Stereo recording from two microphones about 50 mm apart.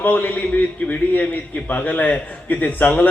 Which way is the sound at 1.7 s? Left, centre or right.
Left.